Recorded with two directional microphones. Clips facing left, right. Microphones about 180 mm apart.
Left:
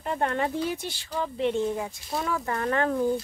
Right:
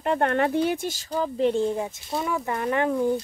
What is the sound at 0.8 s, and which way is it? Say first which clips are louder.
Speech: right 4 dB; 40° right (ahead or behind).